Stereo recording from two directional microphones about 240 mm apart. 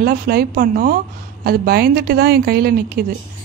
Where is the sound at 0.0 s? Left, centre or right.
Right.